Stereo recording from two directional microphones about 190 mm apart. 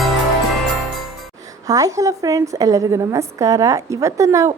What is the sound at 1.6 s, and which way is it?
A woman's voice, 20° right (ahead or behind).